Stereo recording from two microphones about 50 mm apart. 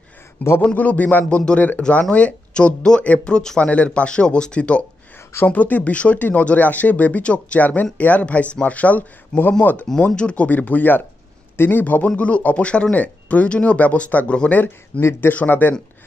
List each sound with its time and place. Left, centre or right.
0.4 s speech: left
5.5 s speech: left
9.9 s a man's voice: left
11.8 s speech: left
15.3 s speech: left